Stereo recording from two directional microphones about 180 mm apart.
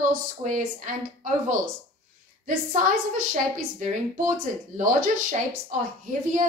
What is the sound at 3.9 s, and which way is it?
A woman's voice, 45° right (ahead or behind).